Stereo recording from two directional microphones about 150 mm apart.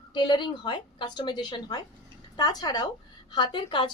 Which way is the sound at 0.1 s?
30° left (ahead or behind).